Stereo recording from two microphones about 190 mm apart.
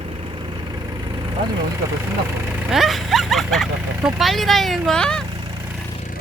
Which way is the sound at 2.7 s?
Centre (ahead or behind).